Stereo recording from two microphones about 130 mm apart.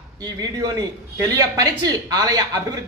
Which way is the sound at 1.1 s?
25° right (ahead or behind).